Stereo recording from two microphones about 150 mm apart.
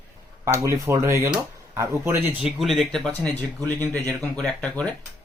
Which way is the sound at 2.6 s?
Centre (ahead or behind).